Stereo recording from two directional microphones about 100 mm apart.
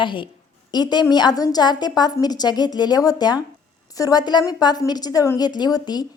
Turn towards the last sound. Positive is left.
turn(degrees=45)  # may be behind; listen again after turning